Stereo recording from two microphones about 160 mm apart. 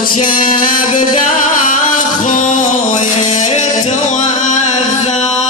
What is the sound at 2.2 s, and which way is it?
Music, 50° left (ahead or behind).